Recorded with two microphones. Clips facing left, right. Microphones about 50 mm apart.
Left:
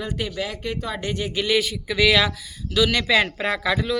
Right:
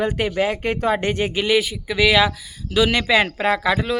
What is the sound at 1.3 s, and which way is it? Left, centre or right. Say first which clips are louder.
A man's voice: right 3 dB; centre.